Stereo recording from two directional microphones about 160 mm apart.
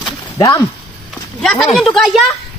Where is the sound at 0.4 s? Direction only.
20° left (ahead or behind).